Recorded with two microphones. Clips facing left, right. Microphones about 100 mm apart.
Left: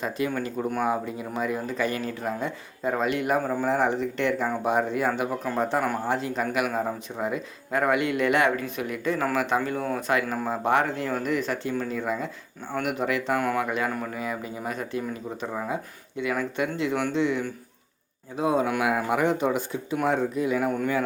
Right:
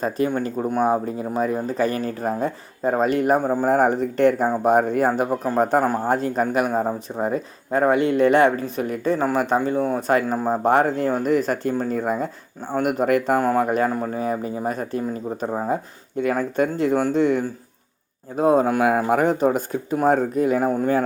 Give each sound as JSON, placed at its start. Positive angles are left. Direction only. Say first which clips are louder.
{"t": 0.3, "sound": "speech", "louder": "right 5 dB", "side_deg": -30}
{"t": 3.7, "sound": "speech", "louder": "right 7 dB", "side_deg": -45}
{"t": 9.6, "sound": "speech", "louder": "right 6 dB", "side_deg": -25}
{"t": 10.1, "sound": "speech", "louder": "right 5 dB", "side_deg": -35}